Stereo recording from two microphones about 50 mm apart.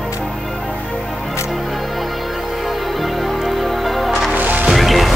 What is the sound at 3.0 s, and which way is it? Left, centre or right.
Music, centre.